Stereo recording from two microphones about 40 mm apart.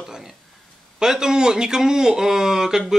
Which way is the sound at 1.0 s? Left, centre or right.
Centre.